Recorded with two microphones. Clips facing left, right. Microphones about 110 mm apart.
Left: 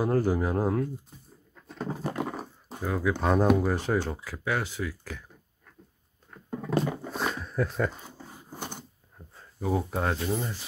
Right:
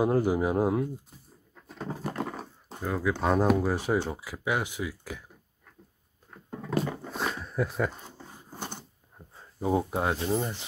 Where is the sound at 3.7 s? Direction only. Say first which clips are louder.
Even; 10° right (ahead or behind).